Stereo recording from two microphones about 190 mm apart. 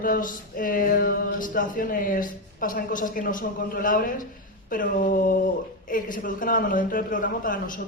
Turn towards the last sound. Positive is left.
turn(degrees=45)  # may be behind; listen again after turning